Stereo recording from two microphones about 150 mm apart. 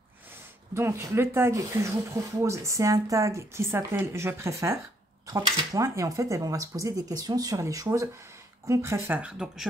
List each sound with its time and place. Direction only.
0.7 s speech: 15° right (ahead or behind)